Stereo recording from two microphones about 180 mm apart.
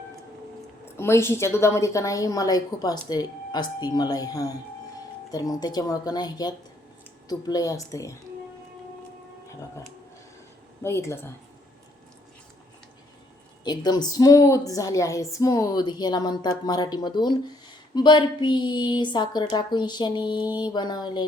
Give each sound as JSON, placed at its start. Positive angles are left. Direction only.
{"t": 0.9, "sound": "a woman's voice", "side_deg": 15}
{"t": 10.8, "sound": "speech", "side_deg": 15}
{"t": 13.7, "sound": "a woman's voice", "side_deg": 20}